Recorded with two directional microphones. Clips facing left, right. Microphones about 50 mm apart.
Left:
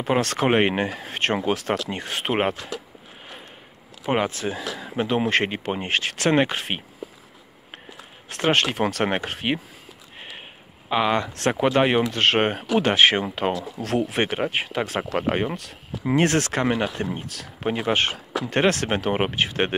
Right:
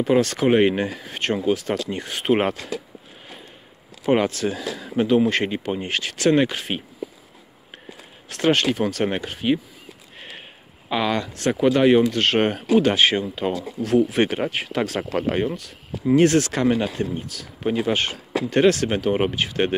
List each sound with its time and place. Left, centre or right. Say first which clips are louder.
0.0 s speech: right 3 dB; left
2.3 s speech: right 2 dB; left
4.0 s speech: right 4 dB; centre
5.1 s speech: right 2 dB; left
8.3 s speech: right 2 dB; left
10.9 s speech: left 1 dB; left
11.3 s speech: even; left
11.6 s speech: right 4 dB; left
14.1 s speech: right 2 dB; left
15.5 s speech: right 1 dB; left